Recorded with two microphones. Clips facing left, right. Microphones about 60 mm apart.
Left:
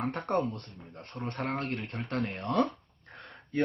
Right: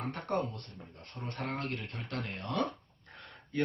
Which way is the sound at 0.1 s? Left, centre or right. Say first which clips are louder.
Left 4 dB; left.